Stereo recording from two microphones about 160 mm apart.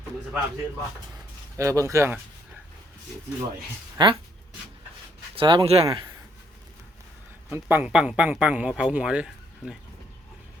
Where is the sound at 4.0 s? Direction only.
30° right (ahead or behind).